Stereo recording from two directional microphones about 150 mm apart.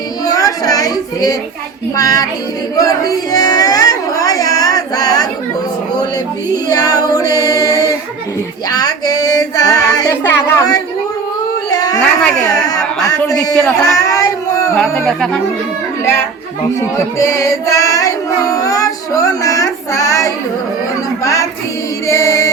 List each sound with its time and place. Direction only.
0.3 s child singing: 25° left (ahead or behind)
2.0 s female singing: 25° left (ahead or behind)
2.7 s a sound: 25° left (ahead or behind)
6.7 s female singing: 25° left (ahead or behind)
11.7 s a sound: 25° left (ahead or behind)
12.2 s speech: 5° left (ahead or behind)
13.8 s child singing: 20° left (ahead or behind)
15.0 s speech: 5° left (ahead or behind)
16.8 s music: 20° left (ahead or behind)
22.0 s chant: 20° left (ahead or behind)